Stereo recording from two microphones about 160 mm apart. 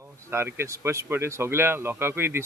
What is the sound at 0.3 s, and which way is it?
Speech, 15° right (ahead or behind).